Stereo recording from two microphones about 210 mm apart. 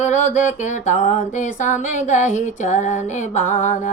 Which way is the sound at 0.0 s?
35° left (ahead or behind).